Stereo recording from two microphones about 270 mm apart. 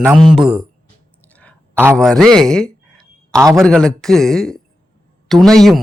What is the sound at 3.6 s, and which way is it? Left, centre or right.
A man's voice, centre.